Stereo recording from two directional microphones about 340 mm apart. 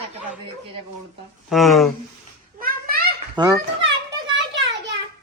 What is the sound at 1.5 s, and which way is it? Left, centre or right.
Speech, centre.